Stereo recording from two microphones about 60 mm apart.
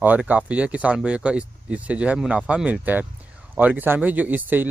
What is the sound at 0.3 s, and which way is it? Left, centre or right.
Speech, right.